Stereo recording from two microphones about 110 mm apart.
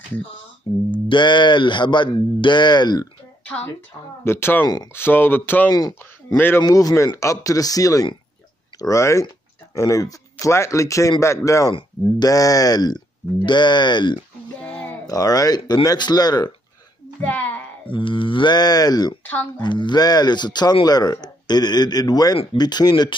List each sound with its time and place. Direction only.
0.9 s speech: 45° left (ahead or behind)
4.2 s speech: 20° left (ahead or behind)
5.7 s speech: 35° left (ahead or behind)
6.3 s speech: 20° left (ahead or behind)
6.6 s speech: 30° left (ahead or behind)
15.0 s speech: 35° left (ahead or behind)
17.2 s a woman's voice: 15° left (ahead or behind)
17.9 s speech: 50° left (ahead or behind)
19.2 s speech: 15° left (ahead or behind)
19.6 s speech: 45° left (ahead or behind)